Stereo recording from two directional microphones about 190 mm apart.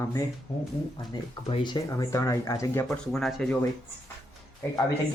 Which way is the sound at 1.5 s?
20° left (ahead or behind).